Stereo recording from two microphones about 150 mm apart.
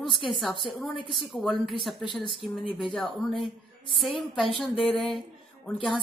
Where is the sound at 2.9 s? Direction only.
5° left (ahead or behind).